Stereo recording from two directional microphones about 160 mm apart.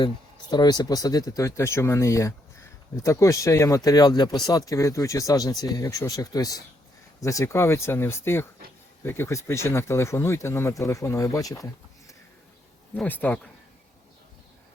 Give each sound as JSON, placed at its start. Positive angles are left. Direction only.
{"t": 0.5, "sound": "speech", "side_deg": 25}